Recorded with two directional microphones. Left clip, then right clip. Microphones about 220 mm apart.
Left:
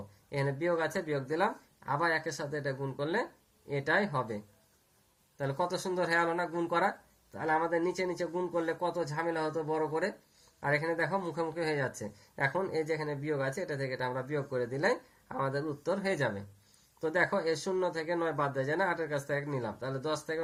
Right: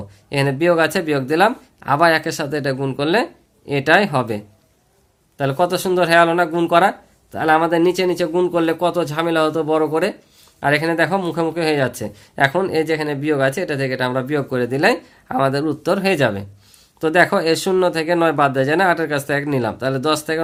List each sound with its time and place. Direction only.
0.3 s speech: 50° right (ahead or behind)
5.4 s speech: 40° right (ahead or behind)